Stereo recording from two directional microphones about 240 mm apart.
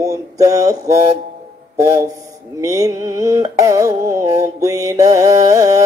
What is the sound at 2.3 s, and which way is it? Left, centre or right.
Carnatic music, centre.